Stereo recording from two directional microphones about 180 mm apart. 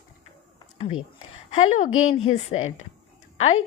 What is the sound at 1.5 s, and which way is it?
A woman's voice, 40° left (ahead or behind).